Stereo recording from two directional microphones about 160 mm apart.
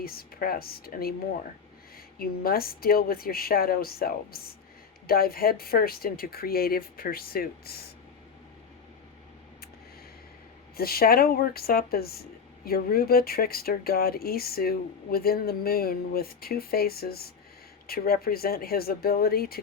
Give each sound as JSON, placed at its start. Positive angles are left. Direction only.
{"t": 0.0, "sound": "speech", "side_deg": 70}
{"t": 2.1, "sound": "speech", "side_deg": 70}
{"t": 10.8, "sound": "speech", "side_deg": 70}